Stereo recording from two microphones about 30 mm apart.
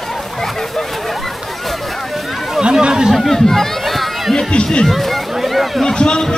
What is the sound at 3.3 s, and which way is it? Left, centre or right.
Speech, centre.